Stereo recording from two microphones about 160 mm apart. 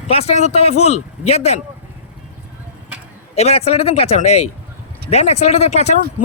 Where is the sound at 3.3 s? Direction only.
40° left (ahead or behind).